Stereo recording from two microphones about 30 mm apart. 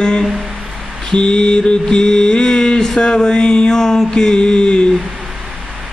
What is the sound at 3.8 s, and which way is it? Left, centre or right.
Mantra, centre.